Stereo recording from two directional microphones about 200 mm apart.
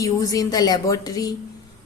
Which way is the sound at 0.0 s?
15° left (ahead or behind).